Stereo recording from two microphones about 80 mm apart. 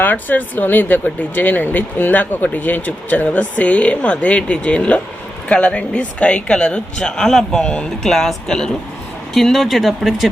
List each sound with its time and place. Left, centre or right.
0.0 s speech: left; by 10.2 s centre